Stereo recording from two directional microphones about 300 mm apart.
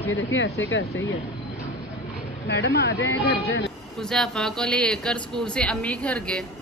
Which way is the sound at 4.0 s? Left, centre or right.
Centre.